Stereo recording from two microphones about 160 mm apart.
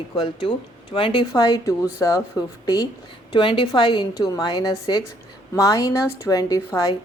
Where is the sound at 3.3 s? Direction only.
30° left (ahead or behind).